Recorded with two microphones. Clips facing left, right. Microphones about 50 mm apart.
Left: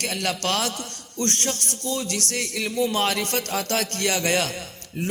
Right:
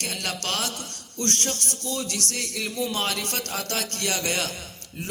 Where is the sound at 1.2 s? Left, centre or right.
Left.